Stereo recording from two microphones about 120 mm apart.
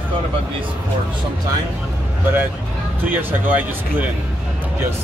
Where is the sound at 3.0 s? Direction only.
15° right (ahead or behind).